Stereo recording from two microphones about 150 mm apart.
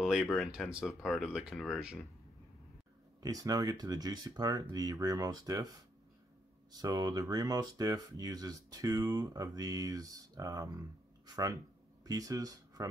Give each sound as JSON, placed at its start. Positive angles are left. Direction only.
{"t": 0.0, "sound": "speech", "side_deg": 0}
{"t": 3.2, "sound": "speech", "side_deg": -25}
{"t": 6.8, "sound": "speech", "side_deg": -25}